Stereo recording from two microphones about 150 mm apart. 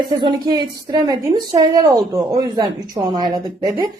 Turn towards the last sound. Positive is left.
turn(degrees=-30)  # may be behind; listen again after turning